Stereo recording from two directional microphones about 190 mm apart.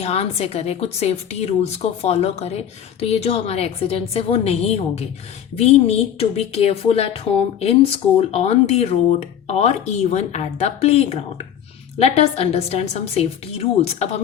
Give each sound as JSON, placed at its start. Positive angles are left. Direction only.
{"t": 0.0, "sound": "a woman's voice", "side_deg": 35}